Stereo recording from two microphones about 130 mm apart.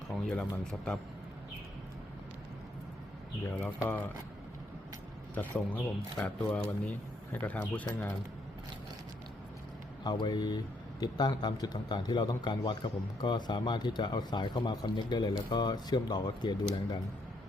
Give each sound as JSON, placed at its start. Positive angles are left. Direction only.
{"t": 0.1, "sound": "speech", "side_deg": 5}
{"t": 3.4, "sound": "speech", "side_deg": 10}
{"t": 5.3, "sound": "speech", "side_deg": 10}
{"t": 10.0, "sound": "a man's voice", "side_deg": 35}